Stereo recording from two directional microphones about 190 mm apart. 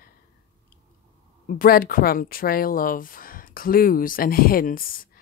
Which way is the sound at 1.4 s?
50° left (ahead or behind).